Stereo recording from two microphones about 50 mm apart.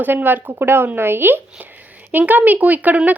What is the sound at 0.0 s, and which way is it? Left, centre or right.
A woman's voice, right.